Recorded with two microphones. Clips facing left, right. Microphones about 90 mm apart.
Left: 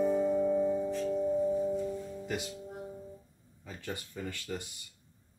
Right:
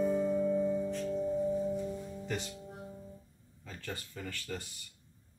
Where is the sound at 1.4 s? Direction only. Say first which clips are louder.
Left 2 dB; 15° left (ahead or behind).